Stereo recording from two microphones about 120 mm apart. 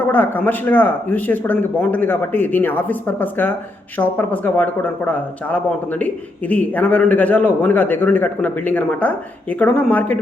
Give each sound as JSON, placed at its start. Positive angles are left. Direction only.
{"t": 0.0, "sound": "a man's voice", "side_deg": 15}